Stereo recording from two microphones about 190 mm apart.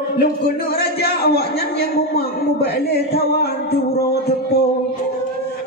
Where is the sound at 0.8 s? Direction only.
55° left (ahead or behind).